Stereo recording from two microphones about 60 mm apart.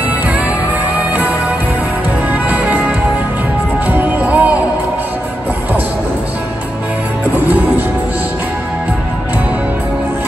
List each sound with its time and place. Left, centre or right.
2.3 s music: right
7.4 s music: right